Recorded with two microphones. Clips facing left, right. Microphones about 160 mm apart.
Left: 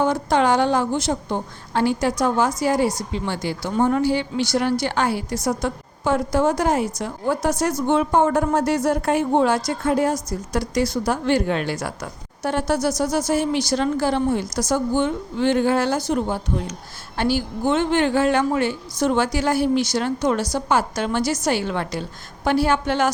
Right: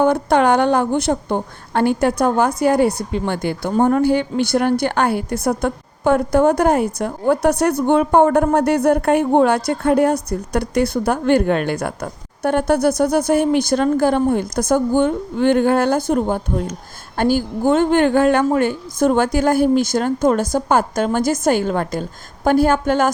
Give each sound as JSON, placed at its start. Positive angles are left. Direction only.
{"t": 0.0, "sound": "a woman's voice", "side_deg": -55}